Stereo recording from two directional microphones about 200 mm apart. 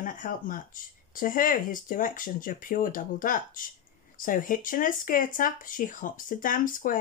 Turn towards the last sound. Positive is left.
turn(degrees=45)  # may be behind; listen again after turning